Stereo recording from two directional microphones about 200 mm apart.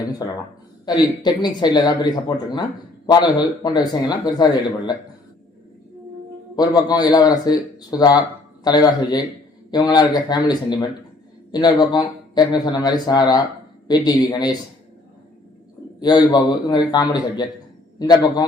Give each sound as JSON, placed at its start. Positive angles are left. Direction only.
{"t": 0.9, "sound": "speech", "side_deg": 20}
{"t": 6.6, "sound": "speech", "side_deg": 20}
{"t": 16.0, "sound": "speech", "side_deg": 20}